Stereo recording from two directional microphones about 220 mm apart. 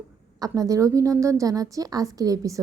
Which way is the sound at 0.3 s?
15° right (ahead or behind).